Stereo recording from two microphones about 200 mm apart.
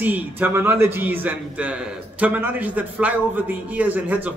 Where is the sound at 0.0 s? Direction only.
10° right (ahead or behind).